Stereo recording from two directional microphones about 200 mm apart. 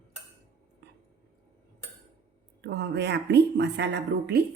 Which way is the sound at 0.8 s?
55° right (ahead or behind).